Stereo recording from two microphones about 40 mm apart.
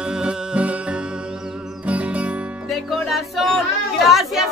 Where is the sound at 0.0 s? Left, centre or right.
Right.